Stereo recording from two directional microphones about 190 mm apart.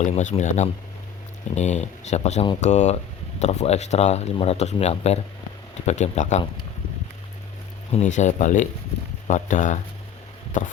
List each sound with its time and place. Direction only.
0.0 s speech: 40° left (ahead or behind)
7.9 s speech: 40° left (ahead or behind)